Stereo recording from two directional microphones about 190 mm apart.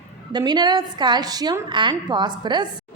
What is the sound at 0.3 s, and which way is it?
A woman's voice, 25° right (ahead or behind).